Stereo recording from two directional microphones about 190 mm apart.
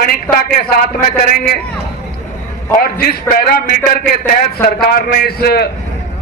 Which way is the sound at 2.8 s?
50° left (ahead or behind).